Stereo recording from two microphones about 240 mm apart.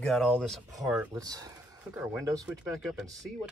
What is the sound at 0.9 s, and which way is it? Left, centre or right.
Speech, centre.